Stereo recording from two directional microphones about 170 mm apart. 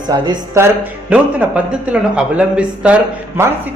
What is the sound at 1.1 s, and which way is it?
Speech, 5° right (ahead or behind).